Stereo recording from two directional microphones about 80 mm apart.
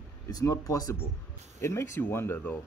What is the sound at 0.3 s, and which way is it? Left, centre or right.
Speech, left.